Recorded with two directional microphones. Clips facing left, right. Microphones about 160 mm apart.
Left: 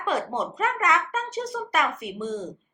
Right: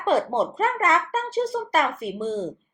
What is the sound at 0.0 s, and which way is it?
Speech, 30° right (ahead or behind).